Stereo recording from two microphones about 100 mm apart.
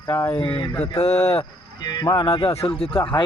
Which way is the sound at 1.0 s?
90° left.